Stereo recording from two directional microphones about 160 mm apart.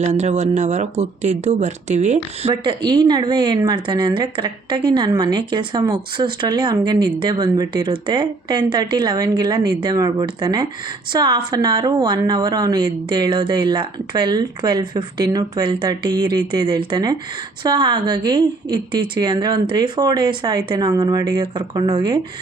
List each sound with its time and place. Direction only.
0.0 s speech: 45° right (ahead or behind)
2.6 s a woman's voice: 25° right (ahead or behind)